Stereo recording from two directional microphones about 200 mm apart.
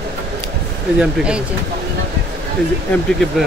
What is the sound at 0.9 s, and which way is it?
Speech, 5° right (ahead or behind).